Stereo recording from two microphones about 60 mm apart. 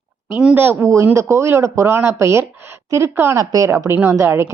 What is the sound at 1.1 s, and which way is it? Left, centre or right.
A woman's voice, right.